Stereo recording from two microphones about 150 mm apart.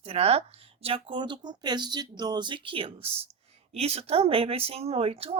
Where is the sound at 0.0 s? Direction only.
45° right (ahead or behind).